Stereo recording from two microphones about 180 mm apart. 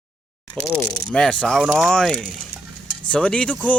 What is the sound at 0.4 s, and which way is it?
Speech, 5° left (ahead or behind).